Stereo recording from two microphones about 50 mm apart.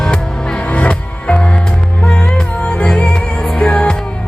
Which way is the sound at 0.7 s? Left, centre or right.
Left.